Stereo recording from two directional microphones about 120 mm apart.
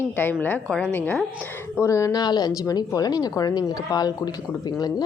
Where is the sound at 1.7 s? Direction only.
25° left (ahead or behind).